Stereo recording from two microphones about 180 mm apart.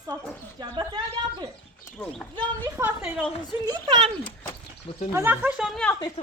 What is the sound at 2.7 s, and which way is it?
Speech, 10° right (ahead or behind).